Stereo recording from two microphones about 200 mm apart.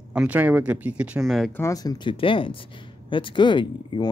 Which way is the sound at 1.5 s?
15° left (ahead or behind).